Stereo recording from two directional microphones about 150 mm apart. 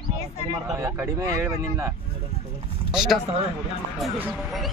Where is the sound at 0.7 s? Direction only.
15° right (ahead or behind).